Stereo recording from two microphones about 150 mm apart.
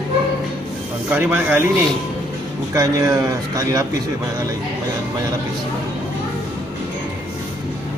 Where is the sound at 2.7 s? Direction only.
20° right (ahead or behind).